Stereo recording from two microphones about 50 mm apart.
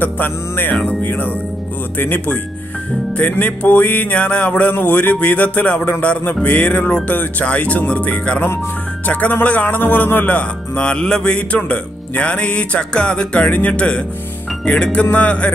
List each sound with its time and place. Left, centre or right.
0.0 s music: left
0.7 s music: centre
1.0 s music: left
6.4 s speech: left
9.3 s music: left; by 11.2 s centre
11.2 s speech: left